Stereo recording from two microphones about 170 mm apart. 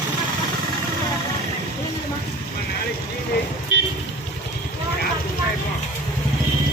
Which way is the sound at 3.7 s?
90° left.